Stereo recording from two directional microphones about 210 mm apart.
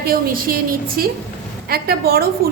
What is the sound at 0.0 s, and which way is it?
A woman's voice, 45° right (ahead or behind).